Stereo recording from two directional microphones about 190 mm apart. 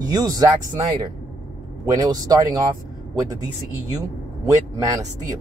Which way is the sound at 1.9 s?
20° right (ahead or behind).